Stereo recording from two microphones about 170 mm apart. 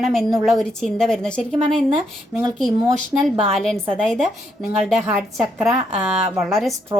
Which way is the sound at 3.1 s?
Centre (ahead or behind).